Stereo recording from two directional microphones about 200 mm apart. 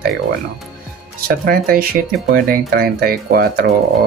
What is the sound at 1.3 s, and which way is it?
Speech, 45° right (ahead or behind).